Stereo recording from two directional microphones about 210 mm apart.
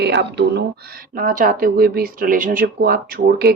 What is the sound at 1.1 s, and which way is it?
Speech, 40° right (ahead or behind).